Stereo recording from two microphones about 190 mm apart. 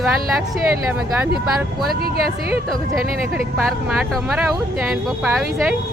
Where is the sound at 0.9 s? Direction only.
10° right (ahead or behind).